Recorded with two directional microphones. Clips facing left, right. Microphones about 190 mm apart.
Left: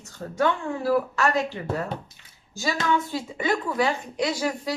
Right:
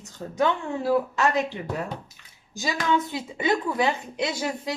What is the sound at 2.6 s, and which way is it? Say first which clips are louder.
A woman's voice: even; 15° right (ahead or behind).